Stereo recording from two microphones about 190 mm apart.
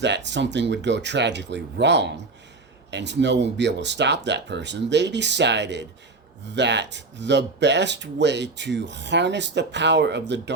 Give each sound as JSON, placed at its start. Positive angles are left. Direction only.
{"t": 0.0, "sound": "speech", "side_deg": -65}